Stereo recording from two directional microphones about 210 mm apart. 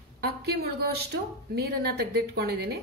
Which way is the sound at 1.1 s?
50° right (ahead or behind).